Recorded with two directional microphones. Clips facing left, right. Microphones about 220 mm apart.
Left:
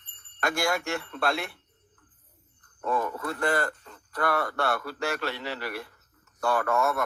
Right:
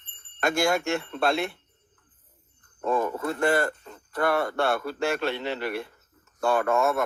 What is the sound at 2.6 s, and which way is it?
A man's voice, 25° right (ahead or behind).